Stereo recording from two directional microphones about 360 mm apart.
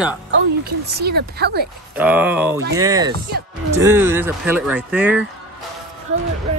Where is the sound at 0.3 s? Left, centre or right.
Right.